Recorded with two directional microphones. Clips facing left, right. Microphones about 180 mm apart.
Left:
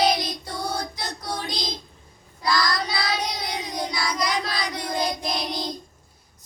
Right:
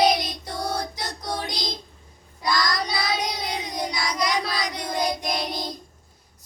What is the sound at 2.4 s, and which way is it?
Child singing, 20° right (ahead or behind).